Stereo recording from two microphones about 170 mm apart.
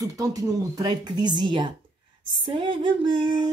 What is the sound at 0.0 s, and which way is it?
Speech, 20° right (ahead or behind).